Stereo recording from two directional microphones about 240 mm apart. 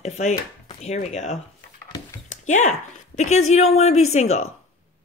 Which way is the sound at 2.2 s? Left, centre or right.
Left.